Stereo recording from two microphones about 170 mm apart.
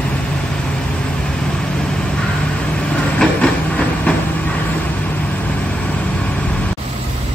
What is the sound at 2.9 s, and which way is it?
Train, 5° left (ahead or behind).